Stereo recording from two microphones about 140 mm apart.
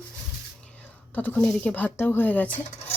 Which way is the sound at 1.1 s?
15° left (ahead or behind).